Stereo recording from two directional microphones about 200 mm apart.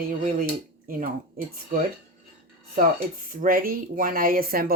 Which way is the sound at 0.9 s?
45° right (ahead or behind).